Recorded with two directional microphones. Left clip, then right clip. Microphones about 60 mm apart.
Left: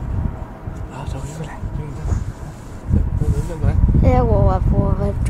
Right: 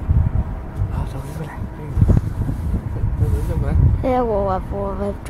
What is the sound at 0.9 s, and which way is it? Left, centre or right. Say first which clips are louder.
Dog: left 1 dB; left.